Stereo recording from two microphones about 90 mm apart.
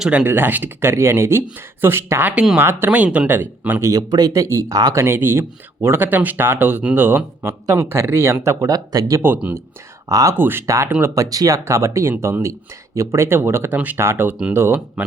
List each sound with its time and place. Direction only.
0.0 s speech: 10° right (ahead or behind)
0.3 s speech: 20° right (ahead or behind)
2.3 s speech: 5° right (ahead or behind)
2.6 s speech: 25° right (ahead or behind)
3.8 s speech: 40° right (ahead or behind)
5.0 s speech: 25° right (ahead or behind)
8.6 s speech: 45° right (ahead or behind)
10.3 s speech: 25° right (ahead or behind)
11.0 s speech: 40° right (ahead or behind)